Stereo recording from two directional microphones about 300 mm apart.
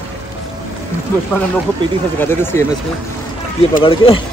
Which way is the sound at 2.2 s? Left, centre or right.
Centre.